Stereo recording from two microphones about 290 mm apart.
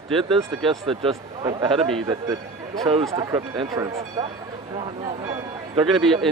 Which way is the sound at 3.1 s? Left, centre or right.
Centre.